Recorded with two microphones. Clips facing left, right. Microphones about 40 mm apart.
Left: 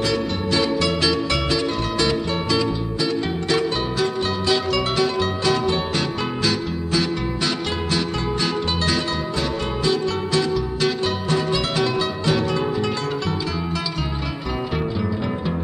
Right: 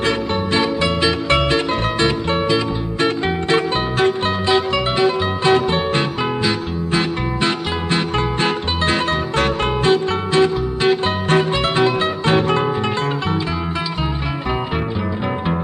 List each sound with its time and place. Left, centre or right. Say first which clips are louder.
0.0 s music: right 3 dB; right
11.2 s music: right 7 dB; right
14.5 s music: right 2 dB; right